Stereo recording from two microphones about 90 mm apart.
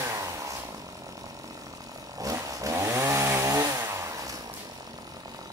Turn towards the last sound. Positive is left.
turn(degrees=-40)  # may be behind; listen again after turning